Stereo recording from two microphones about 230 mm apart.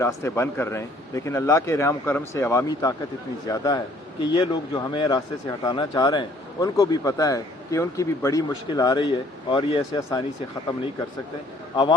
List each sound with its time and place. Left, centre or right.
0.0 s speech: centre